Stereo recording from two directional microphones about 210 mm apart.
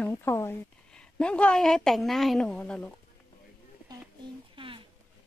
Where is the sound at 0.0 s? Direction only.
10° left (ahead or behind).